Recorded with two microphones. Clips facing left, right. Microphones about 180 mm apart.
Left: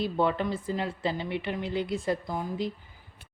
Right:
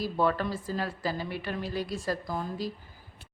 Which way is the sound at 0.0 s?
20° left (ahead or behind).